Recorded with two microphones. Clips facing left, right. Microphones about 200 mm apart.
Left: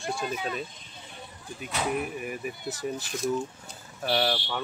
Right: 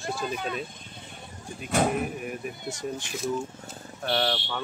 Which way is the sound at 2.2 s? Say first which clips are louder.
Even; 5° left (ahead or behind).